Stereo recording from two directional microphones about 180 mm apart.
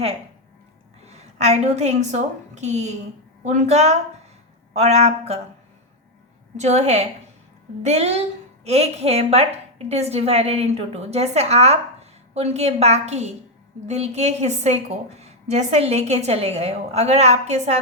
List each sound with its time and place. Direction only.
1.0 s a woman's voice: 40° right (ahead or behind)
6.6 s a woman's voice: 40° right (ahead or behind)